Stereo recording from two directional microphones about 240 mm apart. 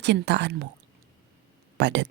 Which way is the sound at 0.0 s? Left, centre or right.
Right.